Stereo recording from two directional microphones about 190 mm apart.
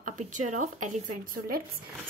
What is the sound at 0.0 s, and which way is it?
A woman's voice, 40° right (ahead or behind).